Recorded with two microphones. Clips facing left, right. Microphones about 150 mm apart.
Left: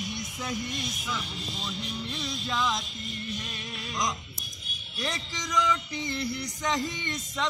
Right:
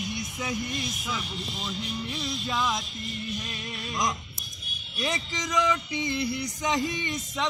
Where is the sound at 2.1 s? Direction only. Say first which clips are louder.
Right 1 dB; 5° right (ahead or behind).